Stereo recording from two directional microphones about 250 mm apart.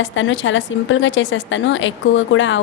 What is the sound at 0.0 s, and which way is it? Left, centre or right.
A woman's voice, left.